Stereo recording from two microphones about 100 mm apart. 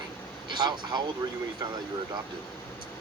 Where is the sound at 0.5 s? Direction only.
45° right (ahead or behind).